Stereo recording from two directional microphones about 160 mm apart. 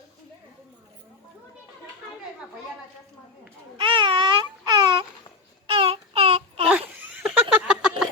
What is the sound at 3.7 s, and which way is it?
Baby cry, 30° right (ahead or behind).